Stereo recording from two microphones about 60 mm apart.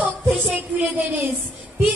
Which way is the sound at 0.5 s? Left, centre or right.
Right.